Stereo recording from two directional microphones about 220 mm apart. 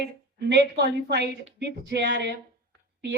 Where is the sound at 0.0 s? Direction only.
50° right (ahead or behind).